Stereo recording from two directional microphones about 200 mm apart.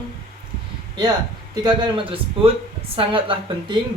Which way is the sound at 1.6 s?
25° right (ahead or behind).